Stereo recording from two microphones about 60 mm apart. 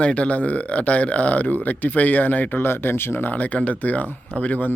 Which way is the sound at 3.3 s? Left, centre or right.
Left.